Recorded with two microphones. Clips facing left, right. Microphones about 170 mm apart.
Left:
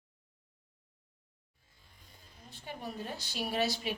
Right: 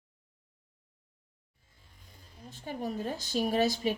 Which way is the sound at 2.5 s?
45° right (ahead or behind).